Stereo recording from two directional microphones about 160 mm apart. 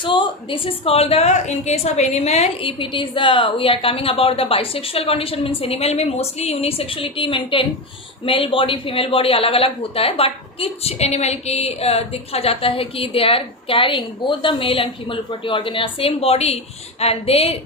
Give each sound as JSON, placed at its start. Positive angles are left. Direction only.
{"t": 0.0, "sound": "speech", "side_deg": 30}